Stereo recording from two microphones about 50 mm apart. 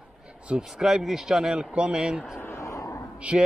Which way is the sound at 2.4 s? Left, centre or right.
Left.